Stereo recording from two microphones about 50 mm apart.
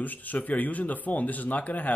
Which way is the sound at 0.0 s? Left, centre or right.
Left.